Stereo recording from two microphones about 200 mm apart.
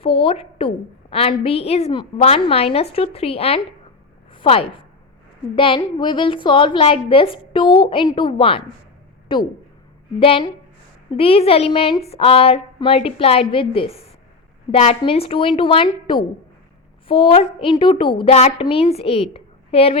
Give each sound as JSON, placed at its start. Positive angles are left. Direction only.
{"t": 0.0, "sound": "a woman's voice", "side_deg": 30}
{"t": 4.3, "sound": "a sound", "side_deg": 25}
{"t": 5.5, "sound": "a woman's voice", "side_deg": 25}